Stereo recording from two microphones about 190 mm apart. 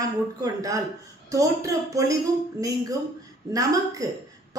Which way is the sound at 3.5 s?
20° right (ahead or behind).